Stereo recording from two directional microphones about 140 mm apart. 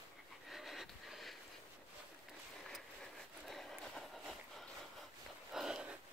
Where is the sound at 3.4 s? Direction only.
Centre (ahead or behind).